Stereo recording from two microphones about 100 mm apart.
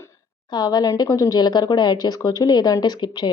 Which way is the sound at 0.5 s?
45° left (ahead or behind).